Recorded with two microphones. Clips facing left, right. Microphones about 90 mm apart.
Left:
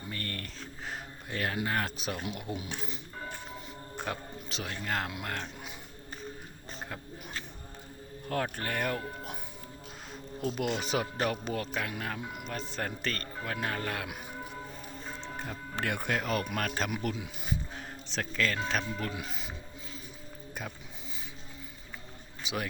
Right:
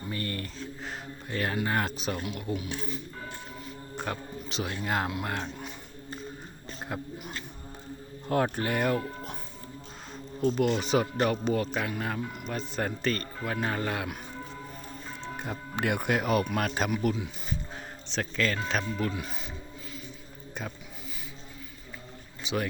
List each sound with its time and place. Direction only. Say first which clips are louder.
0.1 s a sound: right 5 dB; 10° right (ahead or behind)
0.9 s a sound: right 2 dB; centre (ahead or behind)
1.6 s speech: right 3 dB; 5° right (ahead or behind)
2.2 s speech: right 4 dB; 20° left (ahead or behind)
3.9 s speech: right 2 dB; centre (ahead or behind)
8.3 s speech: right 6 dB; 20° right (ahead or behind)
10.4 s speech: right 6 dB; 5° left (ahead or behind)
15.2 s speech: right 6 dB; 15° right (ahead or behind)
16.9 s speech: right 6 dB; centre (ahead or behind)
22.4 s speech: right 5 dB; 5° left (ahead or behind)